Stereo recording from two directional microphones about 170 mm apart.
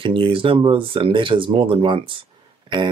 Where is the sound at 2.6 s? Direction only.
25° right (ahead or behind).